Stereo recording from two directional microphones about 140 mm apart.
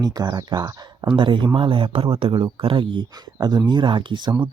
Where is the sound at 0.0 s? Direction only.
30° right (ahead or behind).